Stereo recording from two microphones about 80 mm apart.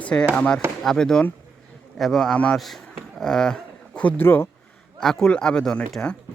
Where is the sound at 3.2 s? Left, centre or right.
Centre.